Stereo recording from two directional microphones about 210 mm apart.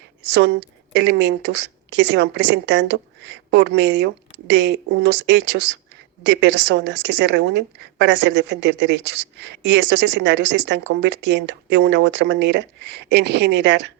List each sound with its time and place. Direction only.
0.3 s a woman's voice: 55° right (ahead or behind)